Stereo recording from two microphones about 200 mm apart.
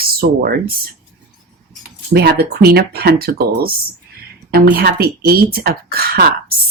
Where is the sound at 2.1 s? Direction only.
55° right (ahead or behind).